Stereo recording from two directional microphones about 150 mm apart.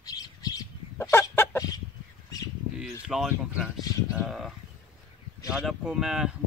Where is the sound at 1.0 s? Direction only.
15° left (ahead or behind).